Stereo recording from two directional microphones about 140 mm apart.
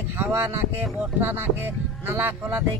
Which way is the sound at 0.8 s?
Centre (ahead or behind).